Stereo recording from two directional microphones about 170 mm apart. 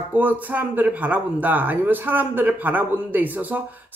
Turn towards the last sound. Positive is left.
turn(degrees=-10)  # may be behind; listen again after turning